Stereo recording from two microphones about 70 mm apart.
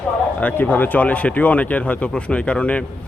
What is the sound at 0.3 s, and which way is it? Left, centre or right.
Speech, left.